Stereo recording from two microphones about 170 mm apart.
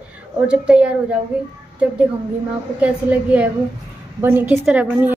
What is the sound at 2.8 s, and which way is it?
A woman's voice, 10° right (ahead or behind).